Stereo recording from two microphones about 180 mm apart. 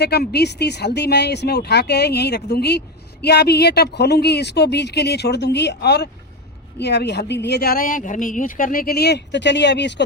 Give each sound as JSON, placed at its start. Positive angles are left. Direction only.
{"t": 0.0, "sound": "speech", "side_deg": 60}